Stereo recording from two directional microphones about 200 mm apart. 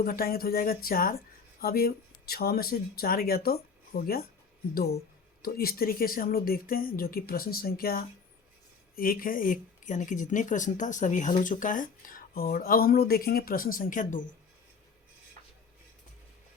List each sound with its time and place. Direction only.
0.0 s speech: 45° left (ahead or behind)